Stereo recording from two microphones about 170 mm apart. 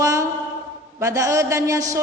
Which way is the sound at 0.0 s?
20° right (ahead or behind).